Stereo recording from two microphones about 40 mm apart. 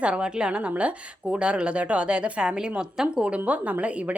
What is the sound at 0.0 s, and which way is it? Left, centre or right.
A woman's voice, right.